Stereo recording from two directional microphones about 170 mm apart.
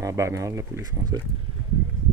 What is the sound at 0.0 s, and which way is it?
Speech, 20° right (ahead or behind).